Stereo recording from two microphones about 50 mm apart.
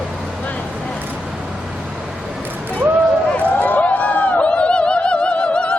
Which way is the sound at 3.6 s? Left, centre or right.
Left.